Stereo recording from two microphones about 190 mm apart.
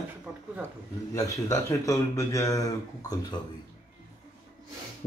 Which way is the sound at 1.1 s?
15° left (ahead or behind).